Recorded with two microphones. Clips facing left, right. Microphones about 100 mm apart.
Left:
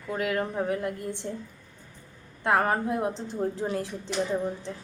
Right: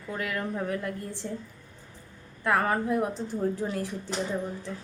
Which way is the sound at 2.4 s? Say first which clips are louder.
Left 1 dB; 25° left (ahead or behind).